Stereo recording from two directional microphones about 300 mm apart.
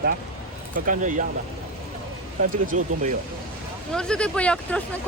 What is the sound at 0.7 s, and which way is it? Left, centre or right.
Speech, right.